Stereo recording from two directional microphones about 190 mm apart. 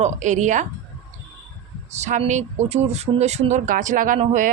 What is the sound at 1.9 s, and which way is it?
Speech, 40° right (ahead or behind).